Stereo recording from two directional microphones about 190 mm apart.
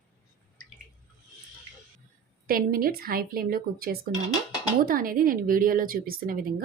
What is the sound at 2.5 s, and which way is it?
A woman's voice, 50° right (ahead or behind).